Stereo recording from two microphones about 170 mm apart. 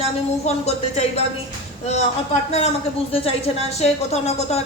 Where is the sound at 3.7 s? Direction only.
40° left (ahead or behind).